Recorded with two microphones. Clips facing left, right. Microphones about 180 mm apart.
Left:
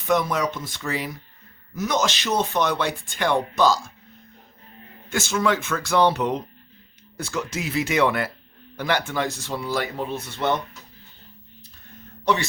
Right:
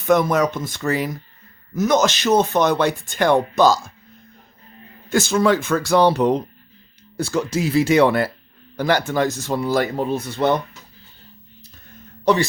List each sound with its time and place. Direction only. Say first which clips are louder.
0.1 s speech: right 5 dB; 50° right (ahead or behind)
5.0 s speech: right 6 dB; 35° right (ahead or behind)
12.2 s speech: right 5 dB; 35° right (ahead or behind)